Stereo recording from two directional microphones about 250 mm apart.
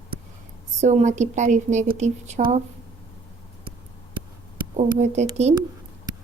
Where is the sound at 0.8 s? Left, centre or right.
Right.